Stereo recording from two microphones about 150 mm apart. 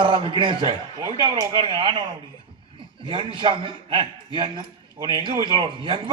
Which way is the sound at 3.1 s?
35° right (ahead or behind).